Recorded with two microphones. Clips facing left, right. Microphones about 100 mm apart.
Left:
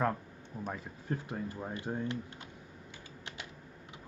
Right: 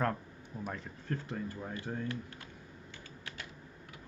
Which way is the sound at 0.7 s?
15° left (ahead or behind).